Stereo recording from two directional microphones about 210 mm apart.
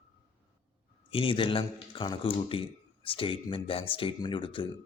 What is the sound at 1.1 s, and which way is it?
Speech, 25° left (ahead or behind).